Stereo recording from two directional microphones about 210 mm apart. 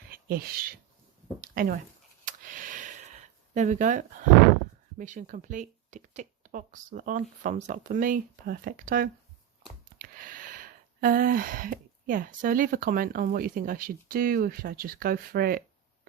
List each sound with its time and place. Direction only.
0.1 s speech: 45° right (ahead or behind)
2.2 s a sound: 40° right (ahead or behind)
3.5 s speech: 35° right (ahead or behind)